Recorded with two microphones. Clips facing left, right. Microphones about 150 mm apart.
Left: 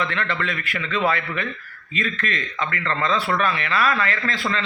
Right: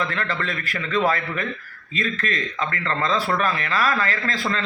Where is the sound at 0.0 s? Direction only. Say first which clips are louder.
Left 1 dB; 35° right (ahead or behind).